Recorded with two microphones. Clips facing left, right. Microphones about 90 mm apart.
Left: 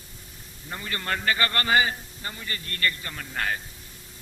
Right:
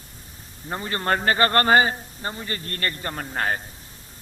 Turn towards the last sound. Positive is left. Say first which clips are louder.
# right 4 dB
turn(degrees=-40)  # may be behind; listen again after turning